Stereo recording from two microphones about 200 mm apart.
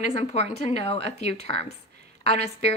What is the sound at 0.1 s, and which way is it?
Speech, 30° left (ahead or behind).